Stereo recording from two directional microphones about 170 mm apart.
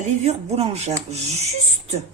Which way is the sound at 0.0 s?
35° right (ahead or behind).